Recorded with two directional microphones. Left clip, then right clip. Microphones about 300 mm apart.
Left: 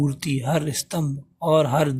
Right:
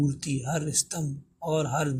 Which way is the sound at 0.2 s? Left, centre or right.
Left.